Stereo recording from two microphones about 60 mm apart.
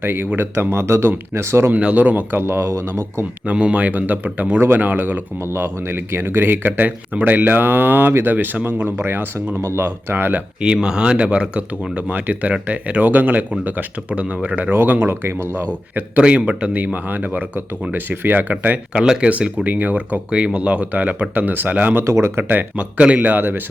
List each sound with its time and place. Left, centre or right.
0.0 s speech: right
1.7 s speech: right
3.4 s speech: right
5.5 s speech: right
10.6 s speech: centre
14.8 s speech: right
16.0 s speech: right
18.9 s speech: centre
22.0 s speech: right
22.4 s speech: right